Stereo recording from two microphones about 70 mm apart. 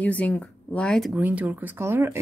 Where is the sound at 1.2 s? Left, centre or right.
Right.